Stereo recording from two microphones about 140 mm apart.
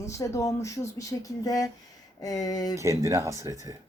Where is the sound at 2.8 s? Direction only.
20° right (ahead or behind).